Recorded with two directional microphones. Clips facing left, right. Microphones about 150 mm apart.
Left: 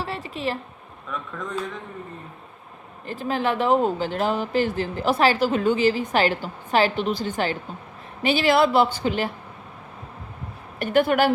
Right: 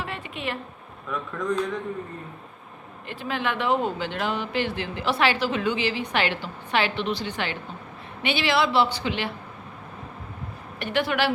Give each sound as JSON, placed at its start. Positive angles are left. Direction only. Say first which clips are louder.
{"t": 0.0, "sound": "a sound", "louder": "left 4 dB", "side_deg": 35}
{"t": 1.4, "sound": "speech", "louder": "right 6 dB", "side_deg": 0}
{"t": 3.1, "sound": "a woman's voice", "louder": "left 4 dB", "side_deg": 40}
{"t": 10.8, "sound": "a woman's voice", "louder": "left 6 dB", "side_deg": 45}